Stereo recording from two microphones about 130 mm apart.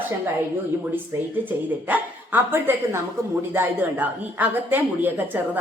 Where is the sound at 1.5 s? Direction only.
15° right (ahead or behind).